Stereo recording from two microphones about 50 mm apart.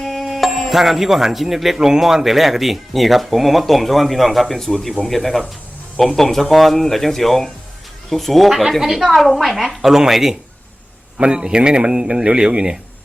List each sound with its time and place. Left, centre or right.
0.0 s speech: centre
11.2 s a man's voice: centre